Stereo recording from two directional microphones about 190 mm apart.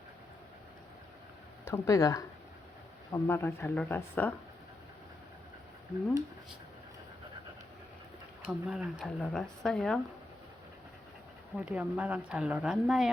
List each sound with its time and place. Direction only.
1.6 s speech: 15° left (ahead or behind)
8.4 s speech: 5° right (ahead or behind)
11.5 s speech: 5° right (ahead or behind)